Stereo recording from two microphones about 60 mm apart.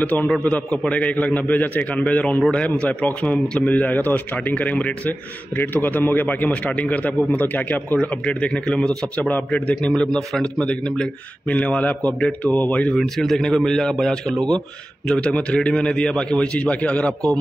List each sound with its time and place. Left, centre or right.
0.0 s a man's voice: left
12.9 s a man's voice: centre